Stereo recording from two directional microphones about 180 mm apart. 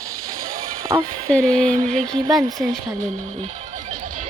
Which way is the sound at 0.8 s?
15° right (ahead or behind).